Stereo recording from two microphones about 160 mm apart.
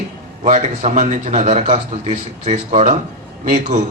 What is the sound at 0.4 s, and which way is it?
A man's voice, 50° right (ahead or behind).